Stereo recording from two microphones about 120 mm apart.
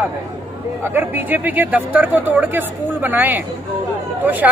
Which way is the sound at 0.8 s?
15° right (ahead or behind).